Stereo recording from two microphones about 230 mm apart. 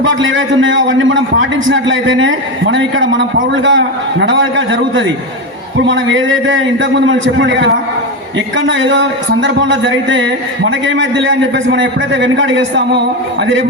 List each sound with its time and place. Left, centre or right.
0.2 s a man's voice: right